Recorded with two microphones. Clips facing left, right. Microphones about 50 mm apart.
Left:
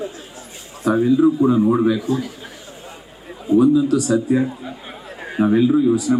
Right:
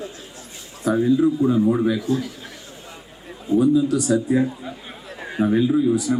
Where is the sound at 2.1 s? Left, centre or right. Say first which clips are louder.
Left 1 dB; left.